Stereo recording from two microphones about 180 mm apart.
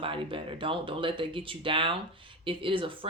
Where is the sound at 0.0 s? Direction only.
30° right (ahead or behind).